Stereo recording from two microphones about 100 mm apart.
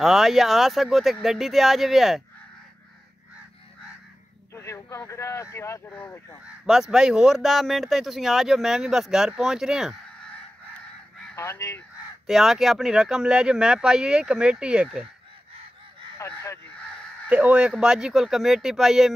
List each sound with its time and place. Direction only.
0.0 s speech: centre (ahead or behind)
4.6 s speech: 30° left (ahead or behind)
6.6 s speech: 5° right (ahead or behind)
11.3 s speech: 30° left (ahead or behind)
12.3 s speech: 5° right (ahead or behind)
16.2 s speech: 30° left (ahead or behind)
17.3 s speech: 10° right (ahead or behind)